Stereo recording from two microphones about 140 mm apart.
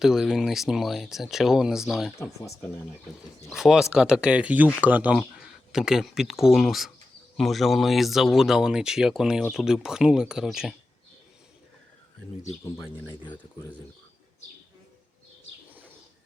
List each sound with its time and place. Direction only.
0.0 s speech: 5° right (ahead or behind)
2.1 s speech: 20° left (ahead or behind)
3.5 s speech: centre (ahead or behind)